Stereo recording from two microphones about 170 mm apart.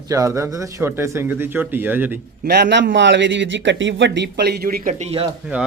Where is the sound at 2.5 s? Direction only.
85° right; by 5.3 s 40° right (ahead or behind).